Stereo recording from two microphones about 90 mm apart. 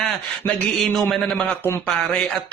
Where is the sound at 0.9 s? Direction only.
Centre (ahead or behind).